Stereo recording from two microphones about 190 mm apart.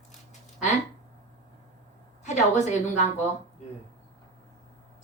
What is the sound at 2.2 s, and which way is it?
Speech, 40° left (ahead or behind).